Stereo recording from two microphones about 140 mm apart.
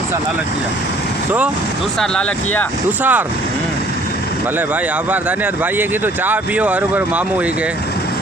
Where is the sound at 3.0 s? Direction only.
10° right (ahead or behind).